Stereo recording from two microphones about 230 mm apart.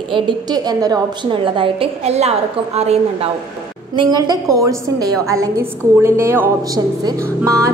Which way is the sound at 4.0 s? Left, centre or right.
Centre.